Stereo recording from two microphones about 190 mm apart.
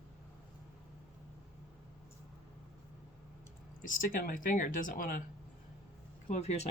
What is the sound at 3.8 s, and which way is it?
Speech, 45° left (ahead or behind).